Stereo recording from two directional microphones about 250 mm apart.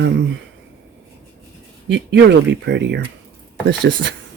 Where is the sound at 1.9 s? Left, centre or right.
Right.